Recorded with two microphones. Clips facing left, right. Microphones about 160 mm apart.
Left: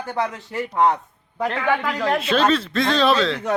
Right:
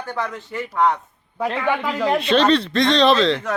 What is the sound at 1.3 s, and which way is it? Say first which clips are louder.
Speech: even; 5° right (ahead or behind).